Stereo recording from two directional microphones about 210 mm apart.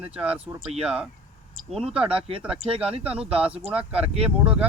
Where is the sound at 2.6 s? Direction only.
25° right (ahead or behind).